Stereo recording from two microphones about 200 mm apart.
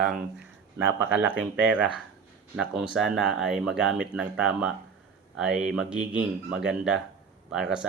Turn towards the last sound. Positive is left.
turn(degrees=-5)  # may be behind; listen again after turning